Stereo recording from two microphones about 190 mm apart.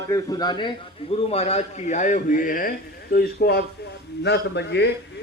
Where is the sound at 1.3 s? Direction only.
35° left (ahead or behind).